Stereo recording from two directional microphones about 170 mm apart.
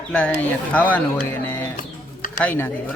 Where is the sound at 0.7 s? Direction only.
10° left (ahead or behind).